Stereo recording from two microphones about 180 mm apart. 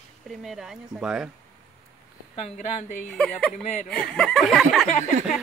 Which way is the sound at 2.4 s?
40° left (ahead or behind).